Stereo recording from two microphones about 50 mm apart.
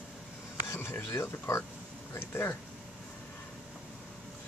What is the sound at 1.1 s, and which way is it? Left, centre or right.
Speech, left.